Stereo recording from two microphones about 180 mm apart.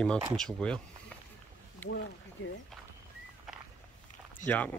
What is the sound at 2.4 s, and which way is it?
Speech, 90° left.